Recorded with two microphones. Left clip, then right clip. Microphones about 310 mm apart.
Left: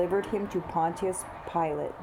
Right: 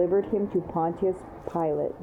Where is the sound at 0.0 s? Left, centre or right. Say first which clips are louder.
Right 4 dB; centre.